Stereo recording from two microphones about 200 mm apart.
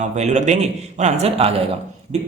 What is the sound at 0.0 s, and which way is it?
Speech, 35° right (ahead or behind).